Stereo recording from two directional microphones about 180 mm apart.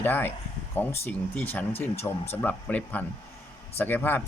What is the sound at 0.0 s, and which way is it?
Speech, 10° left (ahead or behind).